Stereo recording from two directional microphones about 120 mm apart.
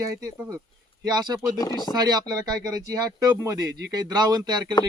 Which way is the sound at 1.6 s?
35° left (ahead or behind).